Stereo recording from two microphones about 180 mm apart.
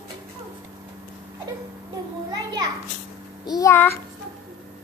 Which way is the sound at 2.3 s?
20° right (ahead or behind).